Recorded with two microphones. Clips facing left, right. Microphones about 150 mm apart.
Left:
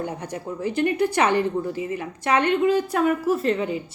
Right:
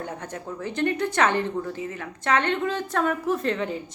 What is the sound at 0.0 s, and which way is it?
Speech, 10° left (ahead or behind).